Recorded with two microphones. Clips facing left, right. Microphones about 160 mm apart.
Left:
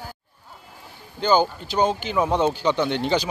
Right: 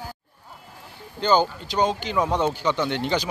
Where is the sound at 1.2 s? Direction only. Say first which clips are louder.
Left 1 dB; 5° left (ahead or behind).